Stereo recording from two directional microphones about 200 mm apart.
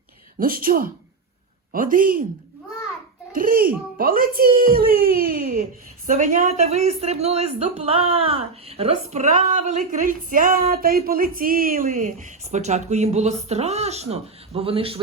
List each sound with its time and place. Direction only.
0.3 s speech: 45° right (ahead or behind)
3.3 s a woman's voice: 45° right (ahead or behind); by 15.0 s 30° right (ahead or behind)